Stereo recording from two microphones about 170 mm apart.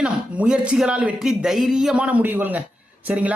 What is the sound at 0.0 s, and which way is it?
Speech, 5° right (ahead or behind).